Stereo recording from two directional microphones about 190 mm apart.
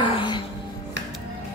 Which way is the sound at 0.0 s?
25° left (ahead or behind).